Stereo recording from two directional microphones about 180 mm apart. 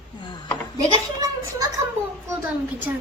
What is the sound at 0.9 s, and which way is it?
Speech, 20° right (ahead or behind).